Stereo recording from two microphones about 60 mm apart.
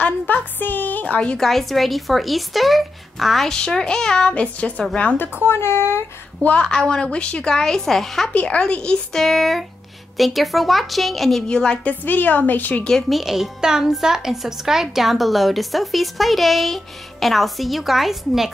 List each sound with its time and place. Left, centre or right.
0.0 s speech: left
1.0 s a woman's voice: centre
1.4 s a child's voice: centre
3.5 s a woman's voice: centre
5.4 s speech: left
6.4 s a woman's voice: centre
8.3 s a woman's voice: left; by 11.4 s centre
11.4 s a woman's voice: centre; by 12.8 s left
13.1 s a child's voice: centre